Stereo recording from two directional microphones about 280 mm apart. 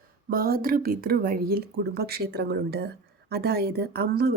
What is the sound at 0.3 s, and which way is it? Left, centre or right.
Speech, right.